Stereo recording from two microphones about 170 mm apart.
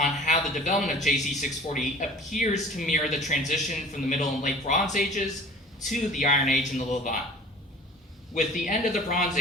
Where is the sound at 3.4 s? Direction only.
50° left (ahead or behind).